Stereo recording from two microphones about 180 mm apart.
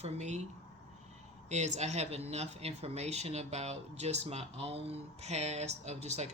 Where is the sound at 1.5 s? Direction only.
40° right (ahead or behind).